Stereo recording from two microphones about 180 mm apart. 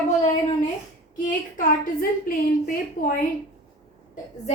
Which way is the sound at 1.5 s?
50° left (ahead or behind).